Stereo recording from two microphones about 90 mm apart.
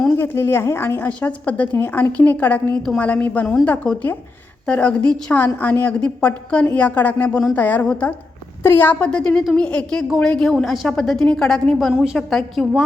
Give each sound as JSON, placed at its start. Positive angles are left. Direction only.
{"t": 0.2, "sound": "a woman's voice", "side_deg": 25}
{"t": 9.0, "sound": "a woman's voice", "side_deg": 10}
{"t": 11.9, "sound": "a woman's voice", "side_deg": 0}